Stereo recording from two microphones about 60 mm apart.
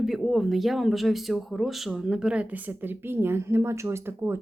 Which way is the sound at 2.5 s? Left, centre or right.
Right.